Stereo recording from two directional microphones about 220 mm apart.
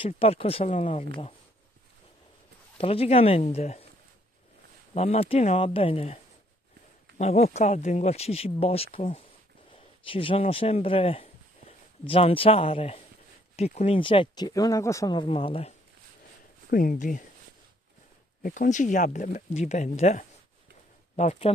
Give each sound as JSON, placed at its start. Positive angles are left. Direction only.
{"t": 0.0, "sound": "speech", "side_deg": 25}
{"t": 2.8, "sound": "speech", "side_deg": 25}
{"t": 4.9, "sound": "speech", "side_deg": 25}
{"t": 7.2, "sound": "speech", "side_deg": 30}
{"t": 16.7, "sound": "speech", "side_deg": 40}
{"t": 18.4, "sound": "speech", "side_deg": 35}